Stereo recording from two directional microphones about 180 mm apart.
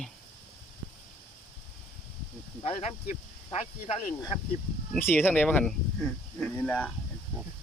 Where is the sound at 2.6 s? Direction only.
35° left (ahead or behind).